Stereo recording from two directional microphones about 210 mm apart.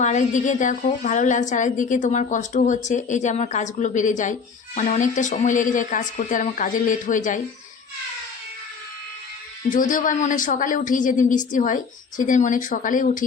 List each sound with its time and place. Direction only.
0.0 s a woman's voice: 35° left (ahead or behind)
9.6 s a woman's voice: 40° left (ahead or behind)